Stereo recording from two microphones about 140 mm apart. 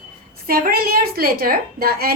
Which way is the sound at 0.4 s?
90° right.